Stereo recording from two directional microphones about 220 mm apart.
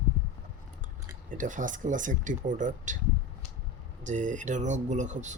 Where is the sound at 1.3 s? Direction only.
35° right (ahead or behind).